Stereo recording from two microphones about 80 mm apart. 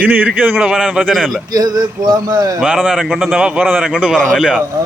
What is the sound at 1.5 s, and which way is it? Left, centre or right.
Speech, right.